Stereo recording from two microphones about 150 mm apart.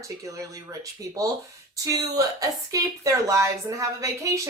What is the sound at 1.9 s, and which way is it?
Speech, 25° right (ahead or behind).